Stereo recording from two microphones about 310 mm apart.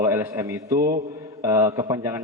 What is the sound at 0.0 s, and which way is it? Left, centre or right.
Speech, centre.